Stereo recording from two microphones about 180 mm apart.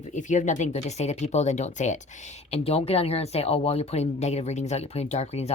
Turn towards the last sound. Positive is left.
turn(degrees=35)  # may be behind; listen again after turning